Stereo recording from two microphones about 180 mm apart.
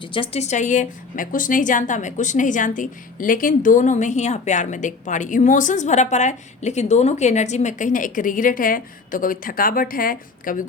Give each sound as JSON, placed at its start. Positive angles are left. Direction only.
{"t": 0.1, "sound": "a woman's voice", "side_deg": 35}